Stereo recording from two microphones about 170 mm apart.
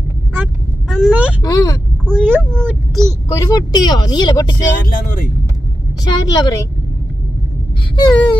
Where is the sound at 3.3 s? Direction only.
20° left (ahead or behind).